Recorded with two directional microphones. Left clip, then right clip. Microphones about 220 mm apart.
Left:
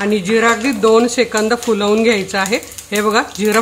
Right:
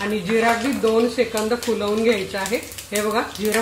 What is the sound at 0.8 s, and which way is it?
Speech, 30° left (ahead or behind).